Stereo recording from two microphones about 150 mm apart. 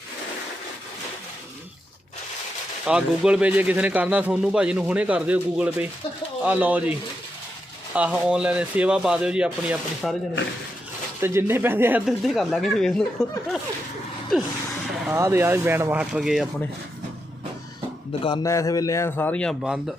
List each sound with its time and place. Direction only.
2.8 s speech: 5° right (ahead or behind)
7.9 s speech: 10° right (ahead or behind)
11.2 s speech: 15° right (ahead or behind)
12.0 s speech: centre (ahead or behind)
15.1 s speech: 20° right (ahead or behind); by 16.5 s centre (ahead or behind)
18.4 s a man's voice: 20° left (ahead or behind)